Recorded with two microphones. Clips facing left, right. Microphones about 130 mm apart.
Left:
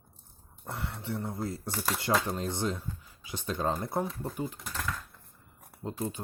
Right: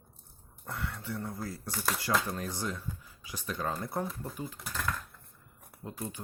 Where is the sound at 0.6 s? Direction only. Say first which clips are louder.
Left 1 dB; 25° left (ahead or behind).